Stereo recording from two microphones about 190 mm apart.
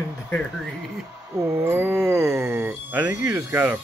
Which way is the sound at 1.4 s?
15° right (ahead or behind).